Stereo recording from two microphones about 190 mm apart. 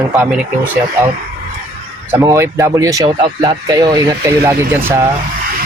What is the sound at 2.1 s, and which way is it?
Speech, 15° right (ahead or behind).